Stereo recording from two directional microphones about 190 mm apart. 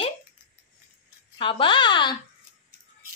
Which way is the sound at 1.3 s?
25° left (ahead or behind).